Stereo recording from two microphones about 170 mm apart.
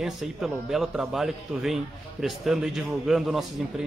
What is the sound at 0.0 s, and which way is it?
A man's voice, centre (ahead or behind).